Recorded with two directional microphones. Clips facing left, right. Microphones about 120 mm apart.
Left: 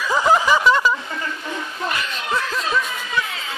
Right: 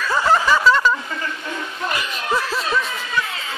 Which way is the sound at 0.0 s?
15° left (ahead or behind).